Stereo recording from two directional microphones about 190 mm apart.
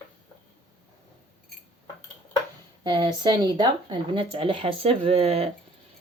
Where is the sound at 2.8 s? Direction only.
25° right (ahead or behind).